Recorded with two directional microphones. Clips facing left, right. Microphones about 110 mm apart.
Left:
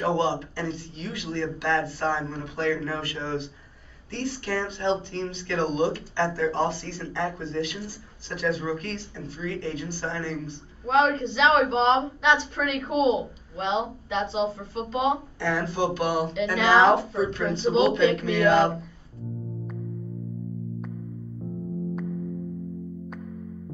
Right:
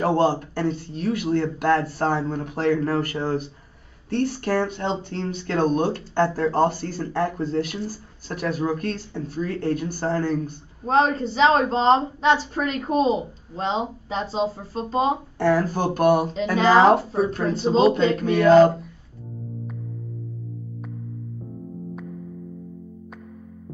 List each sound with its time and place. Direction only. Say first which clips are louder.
0.0 s speech: right 4 dB; 45° right (ahead or behind)